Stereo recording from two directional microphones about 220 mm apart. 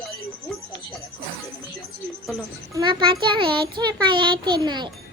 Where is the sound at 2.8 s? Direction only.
20° right (ahead or behind).